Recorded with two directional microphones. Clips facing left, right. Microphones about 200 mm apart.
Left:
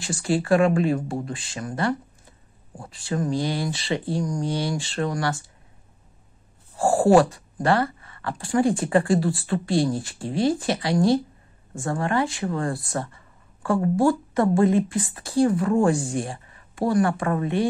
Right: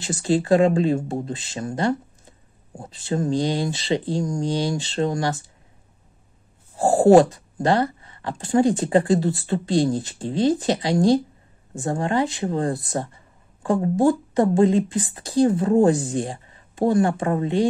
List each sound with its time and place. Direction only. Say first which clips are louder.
0.0 s speech: right 3 dB; 20° right (ahead or behind)
6.8 s speech: right 3 dB; 25° right (ahead or behind)